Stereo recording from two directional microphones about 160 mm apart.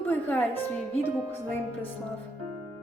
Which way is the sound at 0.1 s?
10° left (ahead or behind).